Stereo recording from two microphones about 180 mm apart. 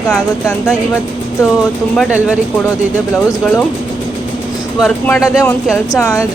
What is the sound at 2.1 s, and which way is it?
Speech, 5° right (ahead or behind).